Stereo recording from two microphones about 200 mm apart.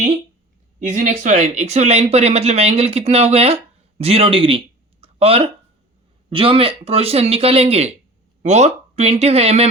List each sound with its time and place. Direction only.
0.8 s speech: 40° right (ahead or behind)